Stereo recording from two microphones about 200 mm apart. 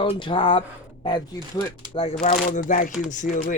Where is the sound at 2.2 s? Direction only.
40° left (ahead or behind).